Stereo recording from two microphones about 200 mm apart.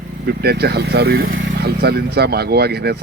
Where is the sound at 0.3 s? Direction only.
55° right (ahead or behind).